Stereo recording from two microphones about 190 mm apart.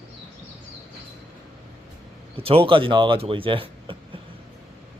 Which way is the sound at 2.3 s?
30° right (ahead or behind).